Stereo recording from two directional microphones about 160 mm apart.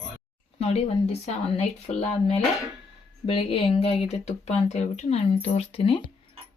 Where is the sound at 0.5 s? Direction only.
40° left (ahead or behind).